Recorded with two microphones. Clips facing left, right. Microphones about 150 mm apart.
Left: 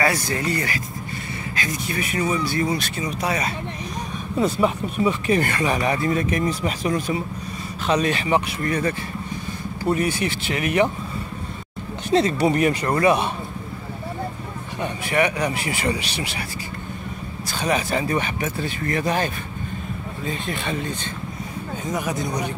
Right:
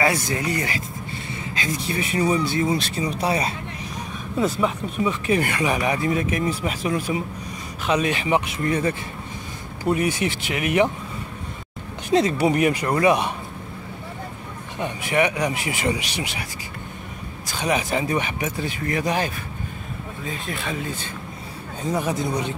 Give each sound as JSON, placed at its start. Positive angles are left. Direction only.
{"t": 0.0, "sound": "speech", "side_deg": -15}
{"t": 4.4, "sound": "speech", "side_deg": 5}
{"t": 5.3, "sound": "speech", "side_deg": -10}
{"t": 12.1, "sound": "speech", "side_deg": -10}
{"t": 14.8, "sound": "speech", "side_deg": -15}
{"t": 17.6, "sound": "speech", "side_deg": -15}
{"t": 21.8, "sound": "speech", "side_deg": -30}